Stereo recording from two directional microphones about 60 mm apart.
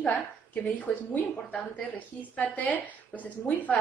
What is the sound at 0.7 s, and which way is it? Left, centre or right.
A woman's voice, left.